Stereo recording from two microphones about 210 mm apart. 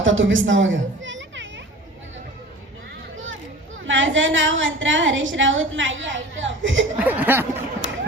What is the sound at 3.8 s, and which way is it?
A woman's voice, 65° right (ahead or behind).